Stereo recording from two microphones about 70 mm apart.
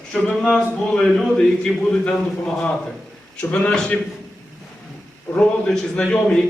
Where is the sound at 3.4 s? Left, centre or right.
Left.